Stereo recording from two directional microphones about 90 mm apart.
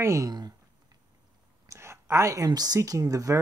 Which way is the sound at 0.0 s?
35° right (ahead or behind).